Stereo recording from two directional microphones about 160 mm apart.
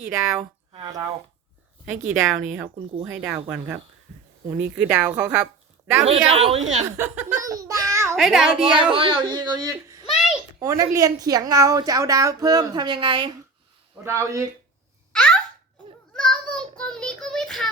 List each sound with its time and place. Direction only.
0.1 s a woman's voice: 25° right (ahead or behind)
1.9 s speech: 15° right (ahead or behind)
4.4 s speech: 10° right (ahead or behind)
6.1 s a woman's voice: 40° right (ahead or behind)
6.8 s a woman's voice: 15° right (ahead or behind)
8.1 s a child's voice: centre (ahead or behind)
9.0 s a woman's voice: 30° right (ahead or behind)
14.0 s speech: 15° right (ahead or behind)
15.1 s babbling: 5° left (ahead or behind)
16.1 s child singing: 5° left (ahead or behind)